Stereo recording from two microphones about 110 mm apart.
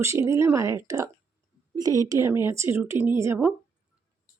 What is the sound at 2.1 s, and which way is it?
Speech, 25° right (ahead or behind).